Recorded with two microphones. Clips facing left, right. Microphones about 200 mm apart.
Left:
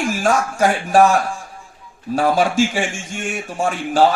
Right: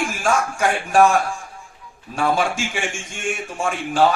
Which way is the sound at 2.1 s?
40° left (ahead or behind).